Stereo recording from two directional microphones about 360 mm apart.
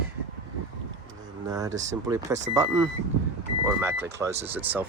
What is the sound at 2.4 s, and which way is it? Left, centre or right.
Speech, centre.